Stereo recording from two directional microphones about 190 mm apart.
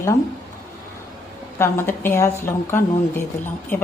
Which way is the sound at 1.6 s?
10° left (ahead or behind).